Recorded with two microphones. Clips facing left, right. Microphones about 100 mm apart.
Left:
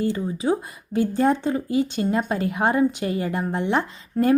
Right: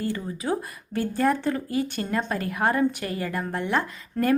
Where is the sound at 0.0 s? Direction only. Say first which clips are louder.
Left 5 dB; 20° left (ahead or behind).